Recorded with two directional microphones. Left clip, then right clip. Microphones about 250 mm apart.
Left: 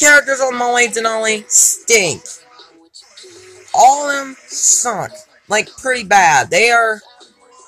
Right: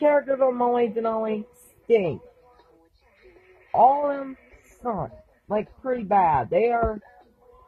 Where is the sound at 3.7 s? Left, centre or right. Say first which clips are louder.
Left 8 dB; left.